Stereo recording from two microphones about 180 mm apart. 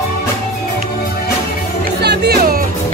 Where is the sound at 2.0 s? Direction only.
65° right (ahead or behind).